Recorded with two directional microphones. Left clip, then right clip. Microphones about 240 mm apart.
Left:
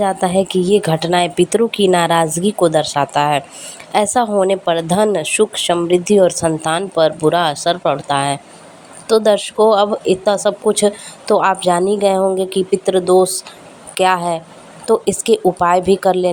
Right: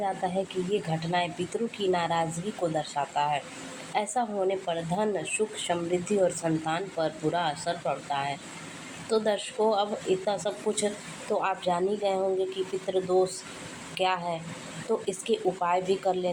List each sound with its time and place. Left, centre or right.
0.0 s a woman's voice: left